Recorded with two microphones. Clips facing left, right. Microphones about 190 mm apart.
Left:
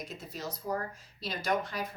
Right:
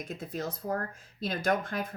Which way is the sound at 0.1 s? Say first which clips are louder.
Right 5 dB; 55° right (ahead or behind).